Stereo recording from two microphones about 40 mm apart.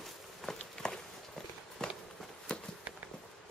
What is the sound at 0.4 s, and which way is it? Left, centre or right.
Walk, centre.